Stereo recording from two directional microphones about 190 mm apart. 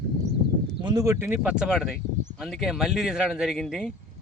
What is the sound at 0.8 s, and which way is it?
A man's voice, 20° right (ahead or behind).